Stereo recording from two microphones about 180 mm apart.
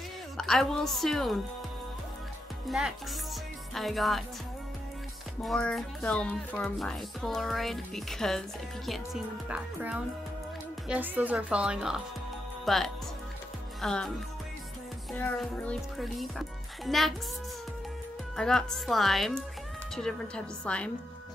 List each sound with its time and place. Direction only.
0.4 s speech: centre (ahead or behind)
3.7 s speech: centre (ahead or behind)
5.4 s speech: 5° left (ahead or behind)
15.4 s speech: 5° left (ahead or behind)
18.3 s speech: 5° left (ahead or behind)